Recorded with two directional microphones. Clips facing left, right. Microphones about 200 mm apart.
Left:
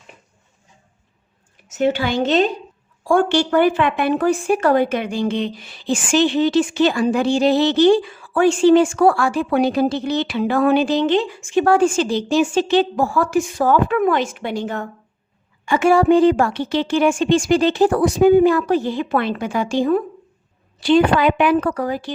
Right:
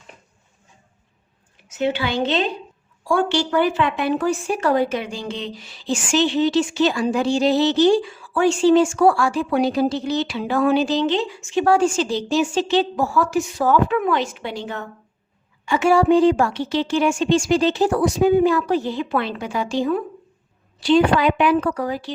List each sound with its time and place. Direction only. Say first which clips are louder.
1.6 s a woman's voice: left 3 dB; 45° left (ahead or behind)